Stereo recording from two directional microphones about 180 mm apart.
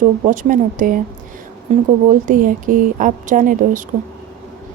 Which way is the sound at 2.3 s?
50° right (ahead or behind).